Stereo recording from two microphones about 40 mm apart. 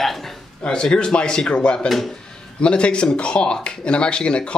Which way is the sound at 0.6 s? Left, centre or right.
Left.